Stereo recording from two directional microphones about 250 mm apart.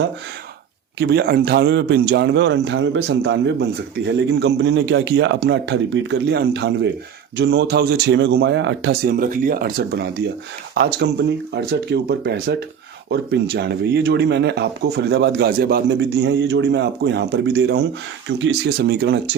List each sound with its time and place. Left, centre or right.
0.9 s a man's voice: right